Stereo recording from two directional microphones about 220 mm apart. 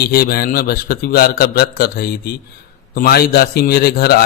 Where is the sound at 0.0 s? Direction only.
45° left (ahead or behind).